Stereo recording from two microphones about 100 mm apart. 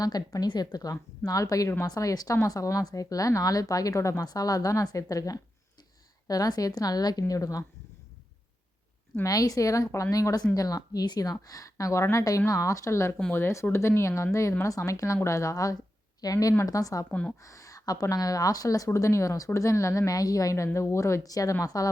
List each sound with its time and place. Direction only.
0.0 s a woman's voice: 40° left (ahead or behind)
9.2 s a woman's voice: 35° left (ahead or behind)
17.1 s speech: 10° left (ahead or behind)
17.4 s a woman's voice: 35° left (ahead or behind)